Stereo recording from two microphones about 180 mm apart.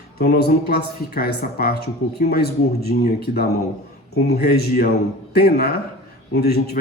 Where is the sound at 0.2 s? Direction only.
60° left (ahead or behind).